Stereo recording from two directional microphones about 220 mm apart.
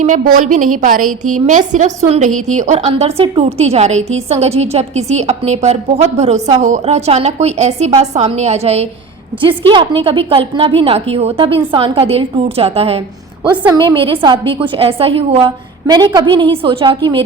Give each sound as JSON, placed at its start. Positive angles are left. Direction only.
{"t": 0.0, "sound": "a woman's voice", "side_deg": -35}